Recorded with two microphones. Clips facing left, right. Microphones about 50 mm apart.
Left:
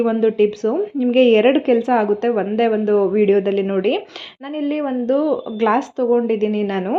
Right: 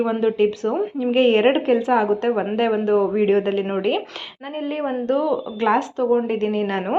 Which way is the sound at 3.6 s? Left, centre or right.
Centre.